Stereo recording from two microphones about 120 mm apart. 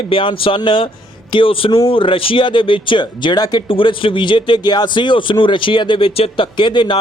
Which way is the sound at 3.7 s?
45° left (ahead or behind).